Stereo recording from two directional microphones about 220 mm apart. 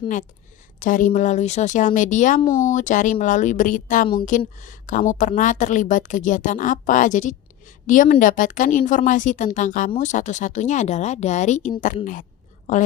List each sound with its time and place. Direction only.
0.8 s a woman's voice: 35° left (ahead or behind)